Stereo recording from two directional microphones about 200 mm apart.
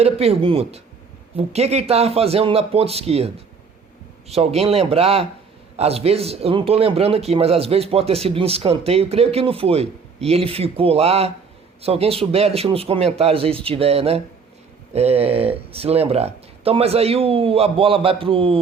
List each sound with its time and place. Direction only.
0.0 s a man's voice: 30° right (ahead or behind)